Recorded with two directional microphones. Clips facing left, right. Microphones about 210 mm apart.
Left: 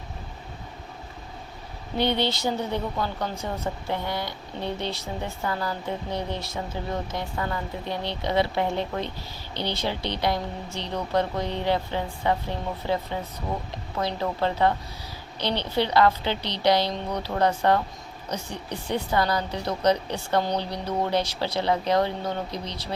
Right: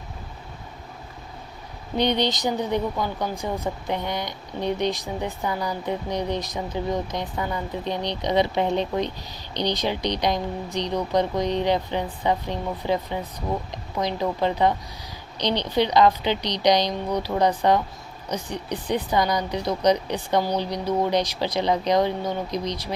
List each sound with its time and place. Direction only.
2.0 s speech: 15° right (ahead or behind)